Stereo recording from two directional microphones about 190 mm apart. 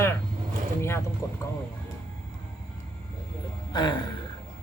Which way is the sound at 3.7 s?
25° left (ahead or behind).